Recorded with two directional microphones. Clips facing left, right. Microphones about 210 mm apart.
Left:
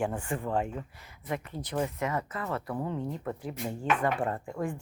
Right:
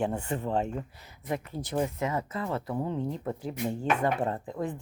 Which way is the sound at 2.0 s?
25° right (ahead or behind).